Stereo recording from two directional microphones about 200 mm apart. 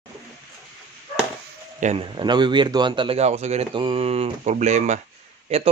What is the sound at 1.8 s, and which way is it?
A man's voice, 30° right (ahead or behind).